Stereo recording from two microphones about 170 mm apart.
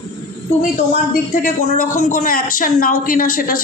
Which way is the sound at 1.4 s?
55° left (ahead or behind).